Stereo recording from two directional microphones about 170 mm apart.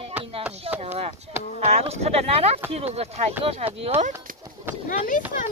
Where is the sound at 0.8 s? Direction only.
40° right (ahead or behind).